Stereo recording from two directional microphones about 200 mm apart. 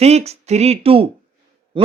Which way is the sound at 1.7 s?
25° right (ahead or behind).